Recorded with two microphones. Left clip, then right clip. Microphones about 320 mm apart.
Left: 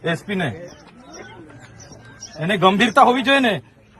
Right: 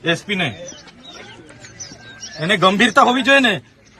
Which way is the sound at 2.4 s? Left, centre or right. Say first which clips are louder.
Right 2 dB; centre.